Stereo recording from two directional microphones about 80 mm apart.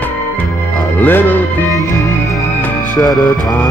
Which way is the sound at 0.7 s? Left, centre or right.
Left.